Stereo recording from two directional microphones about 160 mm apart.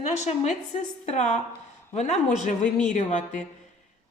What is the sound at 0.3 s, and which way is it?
A woman's voice, 45° left (ahead or behind).